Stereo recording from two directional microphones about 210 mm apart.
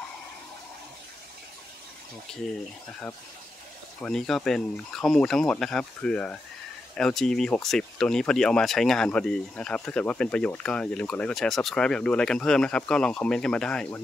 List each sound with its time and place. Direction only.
4.0 s speech: centre (ahead or behind)